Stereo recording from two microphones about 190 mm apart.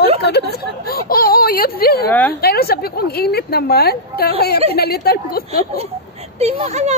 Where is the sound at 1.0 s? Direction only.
50° left (ahead or behind).